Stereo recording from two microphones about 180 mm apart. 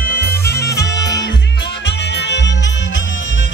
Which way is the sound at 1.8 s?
75° left (ahead or behind).